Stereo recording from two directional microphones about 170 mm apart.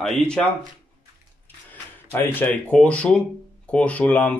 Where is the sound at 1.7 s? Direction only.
10° left (ahead or behind).